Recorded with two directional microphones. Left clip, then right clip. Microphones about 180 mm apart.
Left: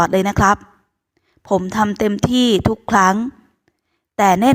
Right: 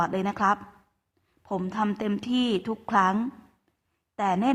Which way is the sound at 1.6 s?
40° left (ahead or behind).